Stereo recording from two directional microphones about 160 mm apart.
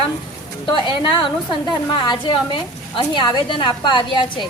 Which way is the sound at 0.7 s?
30° left (ahead or behind).